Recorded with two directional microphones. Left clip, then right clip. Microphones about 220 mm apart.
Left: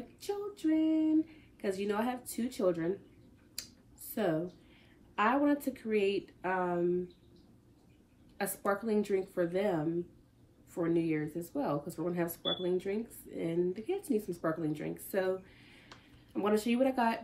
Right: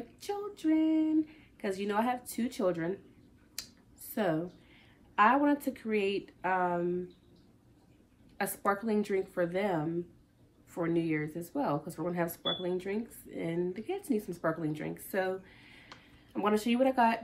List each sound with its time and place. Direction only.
0.2 s speech: 10° right (ahead or behind)
4.1 s a woman's voice: 10° right (ahead or behind)
8.4 s speech: 10° right (ahead or behind)